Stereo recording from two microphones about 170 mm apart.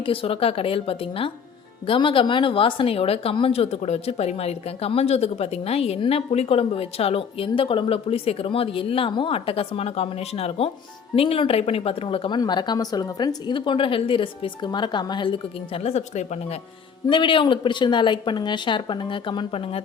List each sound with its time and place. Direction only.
0.0 s a woman's voice: 30° left (ahead or behind)
17.1 s speech: 30° left (ahead or behind)